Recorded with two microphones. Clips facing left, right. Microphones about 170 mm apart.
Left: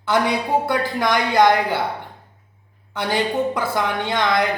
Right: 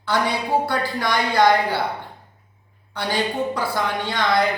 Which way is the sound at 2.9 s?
20° left (ahead or behind).